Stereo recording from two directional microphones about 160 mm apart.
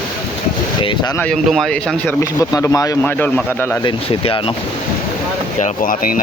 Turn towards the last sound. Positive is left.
turn(degrees=60)  # may be behind; listen again after turning